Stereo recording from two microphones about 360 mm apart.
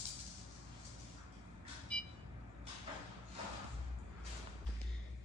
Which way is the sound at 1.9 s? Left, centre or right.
Centre.